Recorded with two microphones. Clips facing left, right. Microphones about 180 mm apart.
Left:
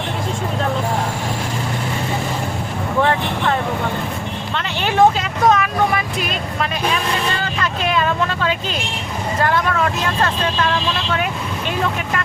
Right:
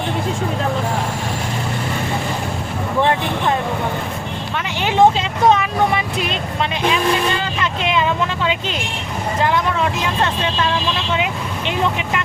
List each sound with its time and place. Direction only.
4.5 s speech: 15° right (ahead or behind)
5.5 s vehicle: 25° right (ahead or behind)